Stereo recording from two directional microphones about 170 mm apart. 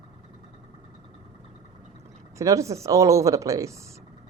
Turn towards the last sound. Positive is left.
turn(degrees=-20)  # may be behind; listen again after turning